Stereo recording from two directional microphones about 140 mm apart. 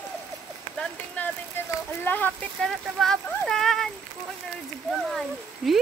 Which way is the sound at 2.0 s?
15° left (ahead or behind).